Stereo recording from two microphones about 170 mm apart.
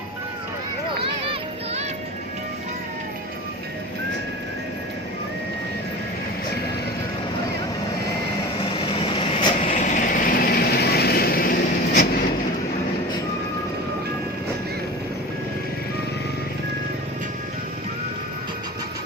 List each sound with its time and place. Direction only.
1.2 s a sound: 35° right (ahead or behind)
9.0 s vehicle: 30° left (ahead or behind)
9.7 s vehicle: 45° left (ahead or behind)